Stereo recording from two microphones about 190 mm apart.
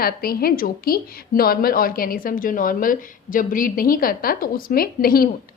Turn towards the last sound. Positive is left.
turn(degrees=50)  # may be behind; listen again after turning